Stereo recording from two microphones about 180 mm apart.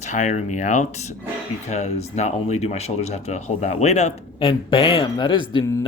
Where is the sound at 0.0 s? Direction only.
40° left (ahead or behind); by 5.8 s 15° left (ahead or behind).